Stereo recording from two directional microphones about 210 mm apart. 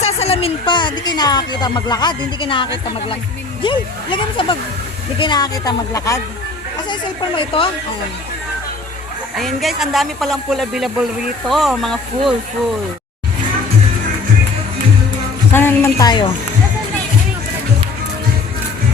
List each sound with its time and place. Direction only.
0.0 s speech: 30° left (ahead or behind)
7.3 s speech: 25° left (ahead or behind)
9.3 s speech: centre (ahead or behind)
15.5 s speech: 10° left (ahead or behind)